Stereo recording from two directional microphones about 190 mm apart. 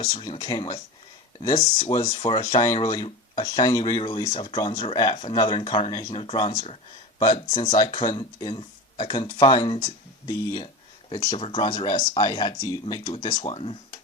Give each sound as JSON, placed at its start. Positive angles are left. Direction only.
{"t": 0.0, "sound": "speech", "side_deg": 20}